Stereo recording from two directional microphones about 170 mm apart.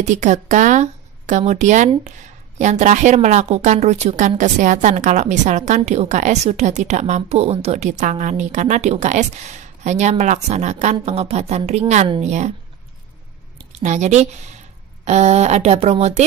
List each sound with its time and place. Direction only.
0.0 s a woman's voice: 45° right (ahead or behind)
13.7 s speech: 45° right (ahead or behind)